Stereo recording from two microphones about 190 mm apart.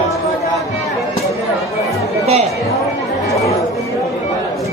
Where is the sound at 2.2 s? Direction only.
30° right (ahead or behind).